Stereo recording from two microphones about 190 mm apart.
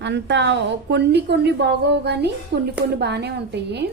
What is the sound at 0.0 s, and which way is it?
Speech, 65° right (ahead or behind).